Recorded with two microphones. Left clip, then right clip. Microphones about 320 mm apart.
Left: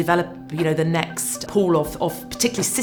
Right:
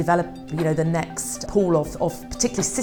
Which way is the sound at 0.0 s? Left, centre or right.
Right.